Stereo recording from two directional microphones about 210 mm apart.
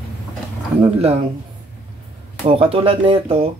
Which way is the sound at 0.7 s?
25° right (ahead or behind).